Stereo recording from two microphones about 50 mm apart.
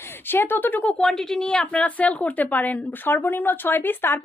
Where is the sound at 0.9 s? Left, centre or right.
Centre.